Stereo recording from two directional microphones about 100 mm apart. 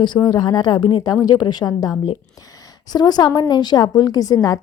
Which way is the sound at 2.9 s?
45° left (ahead or behind).